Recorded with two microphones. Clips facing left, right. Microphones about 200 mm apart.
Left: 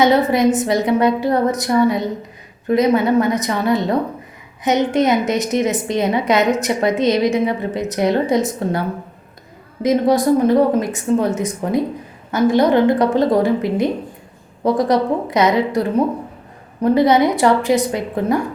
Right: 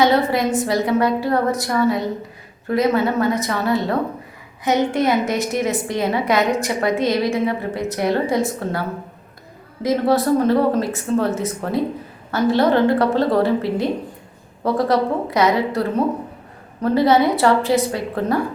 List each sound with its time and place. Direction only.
0.0 s a woman's voice: 20° left (ahead or behind)
9.8 s speech: 15° left (ahead or behind)